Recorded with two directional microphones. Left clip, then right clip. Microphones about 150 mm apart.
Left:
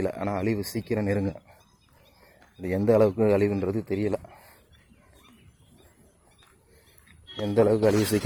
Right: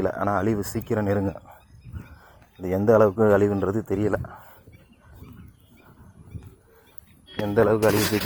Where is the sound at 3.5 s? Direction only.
10° right (ahead or behind).